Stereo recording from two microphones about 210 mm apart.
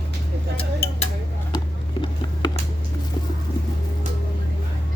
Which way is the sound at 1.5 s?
20° left (ahead or behind).